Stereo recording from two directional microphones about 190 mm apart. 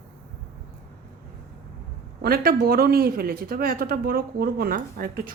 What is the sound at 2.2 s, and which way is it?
A man's voice, 50° right (ahead or behind).